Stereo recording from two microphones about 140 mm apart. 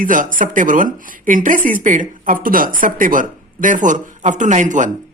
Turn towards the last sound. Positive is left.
turn(degrees=-65)  # may be behind; listen again after turning